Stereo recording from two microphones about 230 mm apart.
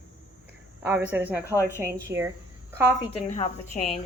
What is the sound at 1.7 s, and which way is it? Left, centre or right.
A woman's voice, centre.